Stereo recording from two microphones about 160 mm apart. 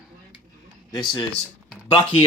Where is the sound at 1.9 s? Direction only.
40° left (ahead or behind).